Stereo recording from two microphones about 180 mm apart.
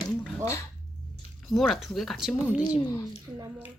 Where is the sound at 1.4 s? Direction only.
Centre (ahead or behind).